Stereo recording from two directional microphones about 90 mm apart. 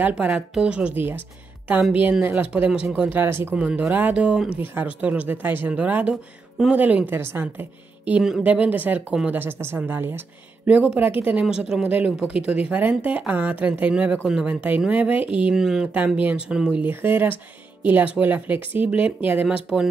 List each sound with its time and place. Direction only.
0.0 s speech: 15° right (ahead or behind)
3.5 s speech: 15° right (ahead or behind)
11.4 s speech: 5° right (ahead or behind)
16.2 s speech: 15° right (ahead or behind)
16.8 s speech: 20° right (ahead or behind)
19.4 s speech: 5° right (ahead or behind)